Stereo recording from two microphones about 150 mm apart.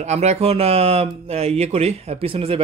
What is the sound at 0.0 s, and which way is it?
Speech, 50° right (ahead or behind).